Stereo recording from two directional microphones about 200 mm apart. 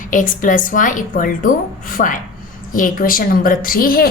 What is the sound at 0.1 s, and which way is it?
A woman's voice, 40° left (ahead or behind).